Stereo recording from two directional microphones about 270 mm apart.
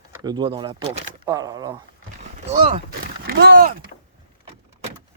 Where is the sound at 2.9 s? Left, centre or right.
Right.